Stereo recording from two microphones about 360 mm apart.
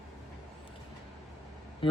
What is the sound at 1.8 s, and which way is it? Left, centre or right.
Speech, centre.